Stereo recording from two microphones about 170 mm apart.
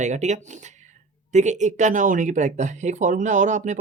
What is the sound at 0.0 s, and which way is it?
Speech, 45° right (ahead or behind).